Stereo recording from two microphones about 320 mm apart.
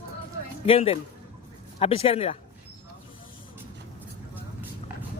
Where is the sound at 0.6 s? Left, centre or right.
Centre.